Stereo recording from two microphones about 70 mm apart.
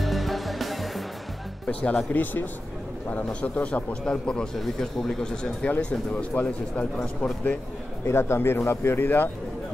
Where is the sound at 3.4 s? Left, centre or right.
Left.